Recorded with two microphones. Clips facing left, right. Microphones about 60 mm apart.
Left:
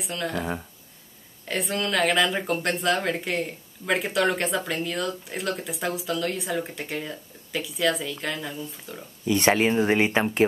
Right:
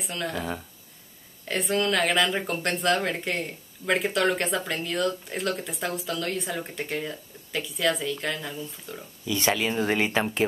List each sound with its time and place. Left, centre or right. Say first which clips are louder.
0.0 s speech: left 2 dB; centre
1.5 s speech: right 1 dB; centre
9.2 s speech: left 5 dB; left
9.8 s speech: left 3 dB; centre